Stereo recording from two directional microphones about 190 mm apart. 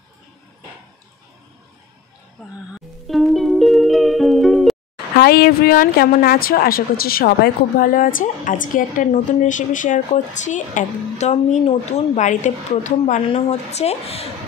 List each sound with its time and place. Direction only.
3.1 s music: centre (ahead or behind)
5.1 s a woman's voice: 55° left (ahead or behind); by 14.3 s 30° left (ahead or behind)